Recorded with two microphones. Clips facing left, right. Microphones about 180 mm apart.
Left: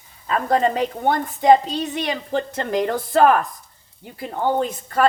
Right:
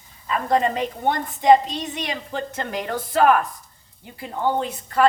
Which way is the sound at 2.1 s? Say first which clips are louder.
Left 5 dB; 35° left (ahead or behind).